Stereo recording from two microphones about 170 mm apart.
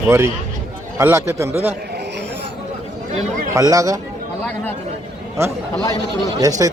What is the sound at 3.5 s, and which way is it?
Speech, 20° right (ahead or behind).